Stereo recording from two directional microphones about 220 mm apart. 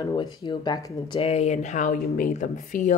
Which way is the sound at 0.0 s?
20° left (ahead or behind).